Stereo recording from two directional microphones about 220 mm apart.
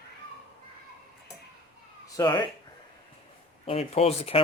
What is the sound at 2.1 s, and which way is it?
Speech, 15° left (ahead or behind).